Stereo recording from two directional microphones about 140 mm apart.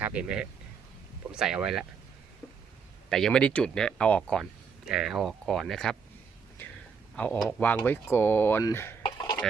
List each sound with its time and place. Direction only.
0.0 s speech: 10° right (ahead or behind)
3.1 s speech: 5° left (ahead or behind)
4.9 s speech: 5° right (ahead or behind)
6.6 s a sound: 15° left (ahead or behind)
7.2 s speech: 10° left (ahead or behind)
9.0 s a sound: 30° left (ahead or behind)